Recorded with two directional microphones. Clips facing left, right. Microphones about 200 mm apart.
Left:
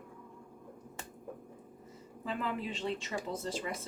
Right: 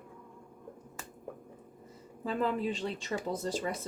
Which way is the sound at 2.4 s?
40° right (ahead or behind).